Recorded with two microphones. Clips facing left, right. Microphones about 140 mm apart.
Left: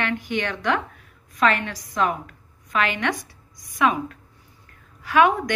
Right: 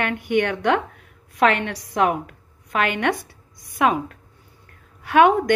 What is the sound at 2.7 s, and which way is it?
A woman's voice, 55° right (ahead or behind).